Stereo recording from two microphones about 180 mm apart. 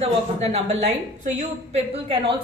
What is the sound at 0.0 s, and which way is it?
A woman's voice, 35° right (ahead or behind).